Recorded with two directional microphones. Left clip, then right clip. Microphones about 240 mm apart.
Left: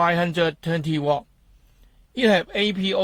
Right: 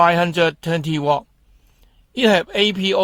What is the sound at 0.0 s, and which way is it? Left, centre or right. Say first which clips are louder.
Mantra: right 5 dB; right.